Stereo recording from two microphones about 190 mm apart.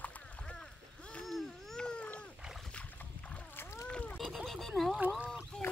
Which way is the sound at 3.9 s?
5° left (ahead or behind).